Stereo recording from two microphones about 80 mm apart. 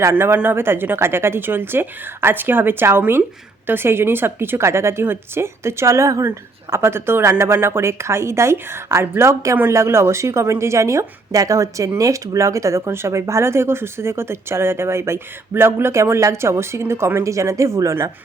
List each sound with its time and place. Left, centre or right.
0.1 s a woman's voice: right